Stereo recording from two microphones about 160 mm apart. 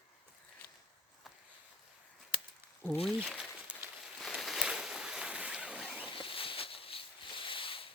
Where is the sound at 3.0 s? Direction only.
Centre (ahead or behind).